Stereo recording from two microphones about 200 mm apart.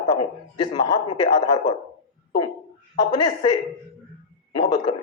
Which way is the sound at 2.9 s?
20° left (ahead or behind).